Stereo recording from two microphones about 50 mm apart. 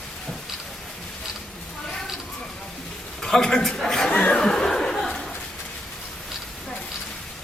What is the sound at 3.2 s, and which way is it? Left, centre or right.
Speech, centre.